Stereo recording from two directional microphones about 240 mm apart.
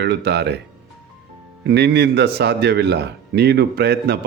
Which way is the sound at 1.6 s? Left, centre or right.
Right.